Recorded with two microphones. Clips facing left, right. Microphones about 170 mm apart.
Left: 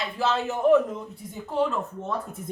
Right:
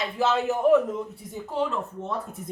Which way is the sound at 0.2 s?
20° right (ahead or behind).